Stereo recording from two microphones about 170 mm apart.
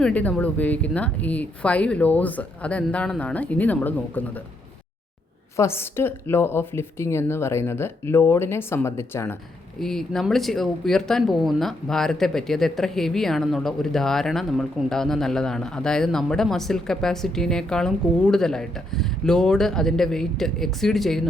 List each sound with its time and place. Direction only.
0.0 s speech: 10° left (ahead or behind)
5.5 s speech: 15° left (ahead or behind)
9.8 s speech: centre (ahead or behind)